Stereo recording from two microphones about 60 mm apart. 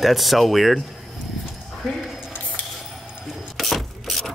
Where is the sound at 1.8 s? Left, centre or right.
Centre.